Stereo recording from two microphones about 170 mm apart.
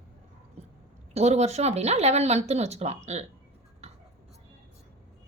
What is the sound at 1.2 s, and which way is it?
A woman's voice, 40° right (ahead or behind).